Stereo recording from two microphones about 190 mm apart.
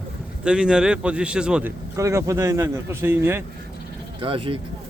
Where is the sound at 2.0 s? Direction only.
15° right (ahead or behind).